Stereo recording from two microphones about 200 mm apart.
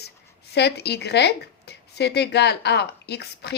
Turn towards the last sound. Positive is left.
turn(degrees=55)  # may be behind; listen again after turning